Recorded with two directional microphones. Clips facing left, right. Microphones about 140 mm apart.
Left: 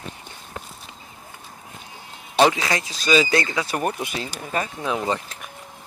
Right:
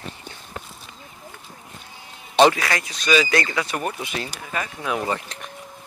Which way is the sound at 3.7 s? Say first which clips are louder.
Left 2 dB; 40° left (ahead or behind).